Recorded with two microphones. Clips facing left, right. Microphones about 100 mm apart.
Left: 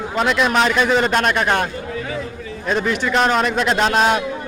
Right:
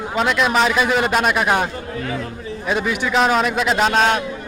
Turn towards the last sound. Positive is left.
turn(degrees=5)  # may be behind; listen again after turning